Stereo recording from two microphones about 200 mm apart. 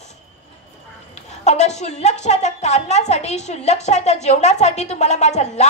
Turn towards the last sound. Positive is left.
turn(degrees=35)  # may be behind; listen again after turning